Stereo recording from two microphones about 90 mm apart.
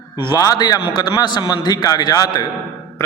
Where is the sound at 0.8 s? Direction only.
60° left (ahead or behind).